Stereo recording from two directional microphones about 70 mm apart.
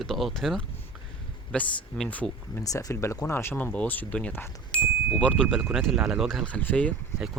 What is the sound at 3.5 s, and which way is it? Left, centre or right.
Speech, centre.